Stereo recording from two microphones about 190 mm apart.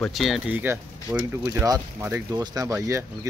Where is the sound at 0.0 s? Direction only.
Centre (ahead or behind).